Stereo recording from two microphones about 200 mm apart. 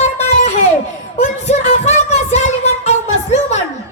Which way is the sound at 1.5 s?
35° left (ahead or behind).